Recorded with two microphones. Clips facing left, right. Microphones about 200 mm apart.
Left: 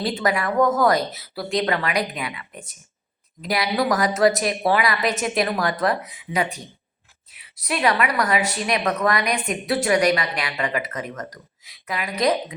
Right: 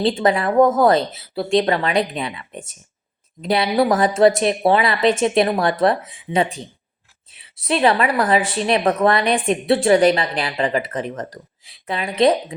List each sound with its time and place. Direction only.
0.0 s a woman's voice: 25° right (ahead or behind)